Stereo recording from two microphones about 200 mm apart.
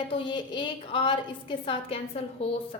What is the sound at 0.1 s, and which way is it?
A woman's voice, 25° left (ahead or behind).